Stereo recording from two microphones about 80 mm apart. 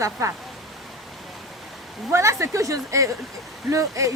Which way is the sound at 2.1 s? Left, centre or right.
Right.